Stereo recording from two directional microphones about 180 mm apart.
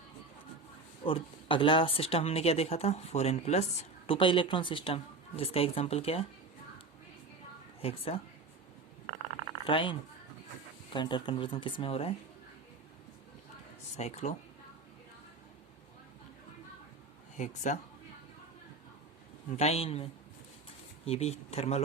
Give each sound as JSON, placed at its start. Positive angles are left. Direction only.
{"t": 1.0, "sound": "speech", "side_deg": 30}
{"t": 7.8, "sound": "a woman's voice", "side_deg": 35}
{"t": 9.6, "sound": "speech", "side_deg": 30}
{"t": 13.9, "sound": "speech", "side_deg": 40}
{"t": 17.3, "sound": "speech", "side_deg": 40}
{"t": 19.5, "sound": "speech", "side_deg": 35}